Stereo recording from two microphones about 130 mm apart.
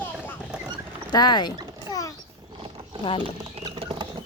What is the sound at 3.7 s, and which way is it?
Patter, 40° right (ahead or behind).